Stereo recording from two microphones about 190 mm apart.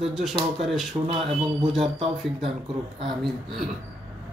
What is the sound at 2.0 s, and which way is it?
Speech, centre (ahead or behind).